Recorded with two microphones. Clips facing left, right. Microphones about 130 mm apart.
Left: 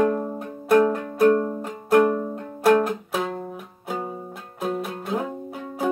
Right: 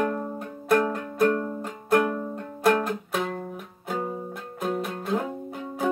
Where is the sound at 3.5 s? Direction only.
5° left (ahead or behind).